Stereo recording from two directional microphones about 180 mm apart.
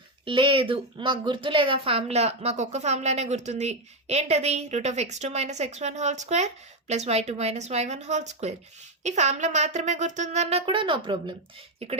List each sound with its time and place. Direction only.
0.3 s speech: 30° right (ahead or behind)